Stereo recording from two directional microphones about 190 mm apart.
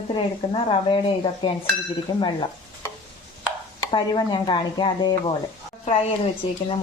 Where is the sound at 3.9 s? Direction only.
20° left (ahead or behind).